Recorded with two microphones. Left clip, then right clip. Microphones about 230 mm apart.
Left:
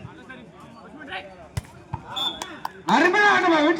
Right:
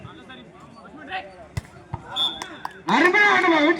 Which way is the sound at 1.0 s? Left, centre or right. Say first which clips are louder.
Right 3 dB; centre.